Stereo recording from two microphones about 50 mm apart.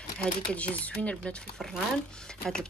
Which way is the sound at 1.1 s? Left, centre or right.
Centre.